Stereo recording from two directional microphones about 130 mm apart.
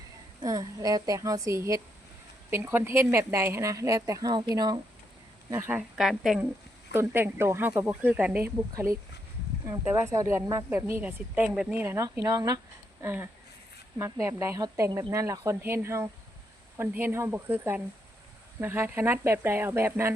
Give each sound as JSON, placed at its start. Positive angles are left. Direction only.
{"t": 0.4, "sound": "speech", "side_deg": -30}
{"t": 5.5, "sound": "speech", "side_deg": -20}
{"t": 6.0, "sound": "speech", "side_deg": -5}
{"t": 6.9, "sound": "speech", "side_deg": -15}
{"t": 8.7, "sound": "speech", "side_deg": -25}
{"t": 11.8, "sound": "speech", "side_deg": -25}
{"t": 13.0, "sound": "speech", "side_deg": -15}